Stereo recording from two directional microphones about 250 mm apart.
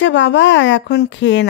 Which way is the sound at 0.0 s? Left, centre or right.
Left.